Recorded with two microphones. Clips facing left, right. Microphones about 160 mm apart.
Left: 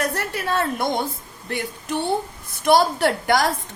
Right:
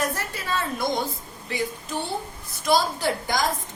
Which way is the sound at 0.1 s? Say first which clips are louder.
Left 5 dB; 65° left (ahead or behind).